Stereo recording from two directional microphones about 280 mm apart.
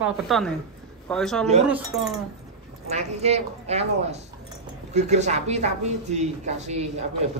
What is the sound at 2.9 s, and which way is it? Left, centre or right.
Speech, right.